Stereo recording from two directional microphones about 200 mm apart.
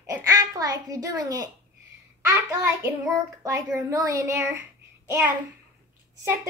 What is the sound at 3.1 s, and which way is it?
A woman's voice, 15° right (ahead or behind).